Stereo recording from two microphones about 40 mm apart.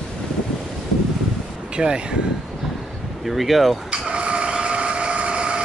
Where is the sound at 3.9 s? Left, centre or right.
Right.